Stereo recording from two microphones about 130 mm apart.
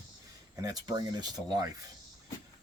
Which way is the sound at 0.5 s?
30° right (ahead or behind).